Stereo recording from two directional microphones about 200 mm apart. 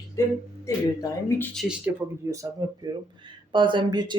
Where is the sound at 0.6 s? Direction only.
15° left (ahead or behind).